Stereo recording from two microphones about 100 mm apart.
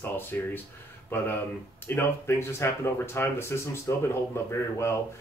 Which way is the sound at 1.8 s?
25° left (ahead or behind).